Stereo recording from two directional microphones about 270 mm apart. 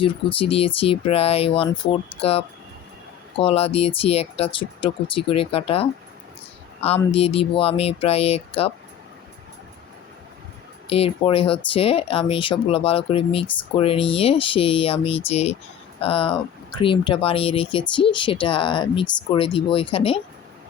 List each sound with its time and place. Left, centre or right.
0.0 s speech: centre
10.8 s speech: left